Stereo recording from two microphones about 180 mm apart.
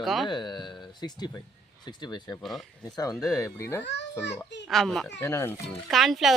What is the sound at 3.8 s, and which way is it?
Speech, 75° left (ahead or behind).